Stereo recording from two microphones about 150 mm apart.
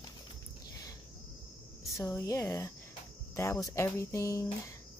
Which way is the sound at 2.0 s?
20° left (ahead or behind).